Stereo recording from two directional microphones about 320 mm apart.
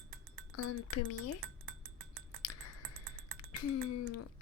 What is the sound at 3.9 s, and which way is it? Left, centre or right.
Speech, left.